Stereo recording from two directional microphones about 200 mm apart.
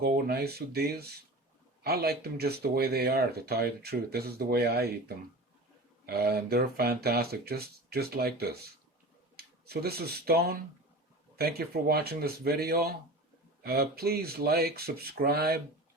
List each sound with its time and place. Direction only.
0.0 s speech: 50° right (ahead or behind)